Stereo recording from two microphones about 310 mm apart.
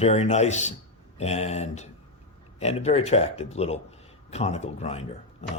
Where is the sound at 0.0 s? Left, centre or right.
Left.